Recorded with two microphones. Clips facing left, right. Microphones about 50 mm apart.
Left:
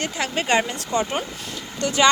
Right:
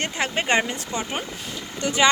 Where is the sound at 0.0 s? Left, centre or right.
Right.